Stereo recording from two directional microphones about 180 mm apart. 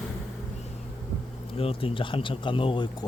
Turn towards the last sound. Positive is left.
turn(degrees=25)  # may be behind; listen again after turning